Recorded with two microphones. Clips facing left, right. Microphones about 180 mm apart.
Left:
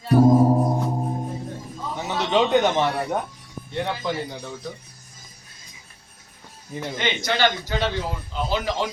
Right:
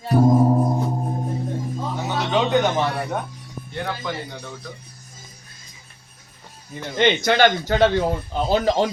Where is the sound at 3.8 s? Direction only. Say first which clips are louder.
Even; 30° left (ahead or behind).